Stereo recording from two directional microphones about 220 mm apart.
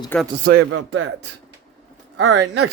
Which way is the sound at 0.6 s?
60° right (ahead or behind).